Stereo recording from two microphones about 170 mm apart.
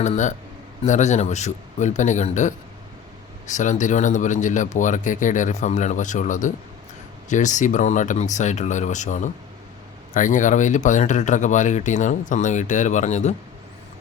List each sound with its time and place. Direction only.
0.0 s speech: 45° left (ahead or behind)